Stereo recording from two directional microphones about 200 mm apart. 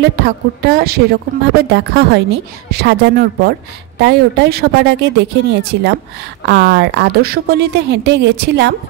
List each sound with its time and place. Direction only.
0.2 s a woman's voice: 50° right (ahead or behind)